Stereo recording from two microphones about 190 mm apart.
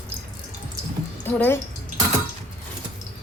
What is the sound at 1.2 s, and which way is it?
Speech, 10° left (ahead or behind).